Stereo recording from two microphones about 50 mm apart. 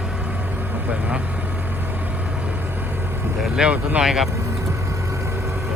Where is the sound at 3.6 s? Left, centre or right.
Centre.